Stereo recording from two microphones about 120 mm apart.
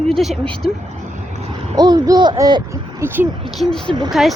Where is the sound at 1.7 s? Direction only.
35° right (ahead or behind).